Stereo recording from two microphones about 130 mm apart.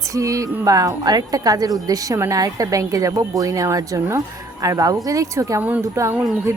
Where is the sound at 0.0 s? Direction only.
25° right (ahead or behind).